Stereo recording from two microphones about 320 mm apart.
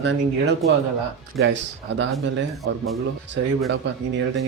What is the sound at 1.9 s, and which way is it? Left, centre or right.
Speech, right.